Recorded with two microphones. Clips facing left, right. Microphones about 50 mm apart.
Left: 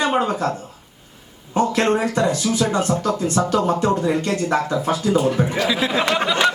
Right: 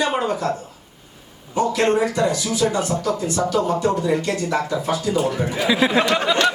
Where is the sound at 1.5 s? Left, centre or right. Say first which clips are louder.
Even; left.